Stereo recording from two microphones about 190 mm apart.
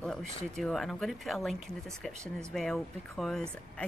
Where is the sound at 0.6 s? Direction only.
Centre (ahead or behind).